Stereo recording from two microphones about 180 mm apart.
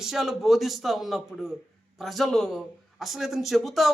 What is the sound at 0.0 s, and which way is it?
A man's voice, centre (ahead or behind).